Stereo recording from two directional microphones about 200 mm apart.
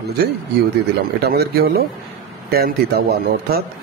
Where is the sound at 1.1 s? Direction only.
50° right (ahead or behind).